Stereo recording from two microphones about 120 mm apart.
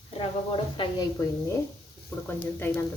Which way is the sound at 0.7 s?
35° left (ahead or behind).